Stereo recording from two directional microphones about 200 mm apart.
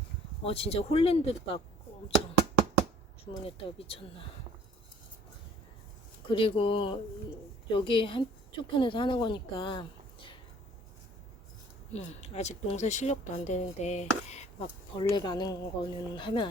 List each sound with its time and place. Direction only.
0.4 s speech: 30° left (ahead or behind)
3.4 s speech: 30° left (ahead or behind)
6.2 s speech: 25° left (ahead or behind)
11.9 s speech: 35° left (ahead or behind)
14.9 s speech: 20° left (ahead or behind)